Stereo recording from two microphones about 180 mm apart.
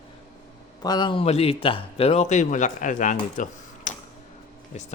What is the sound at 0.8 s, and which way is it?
A man's voice, 25° left (ahead or behind).